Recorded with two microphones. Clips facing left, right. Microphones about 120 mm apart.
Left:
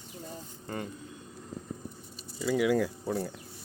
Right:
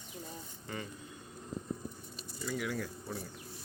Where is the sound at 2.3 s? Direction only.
90° left.